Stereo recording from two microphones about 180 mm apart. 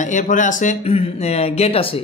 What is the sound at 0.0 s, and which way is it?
Speech, 45° left (ahead or behind).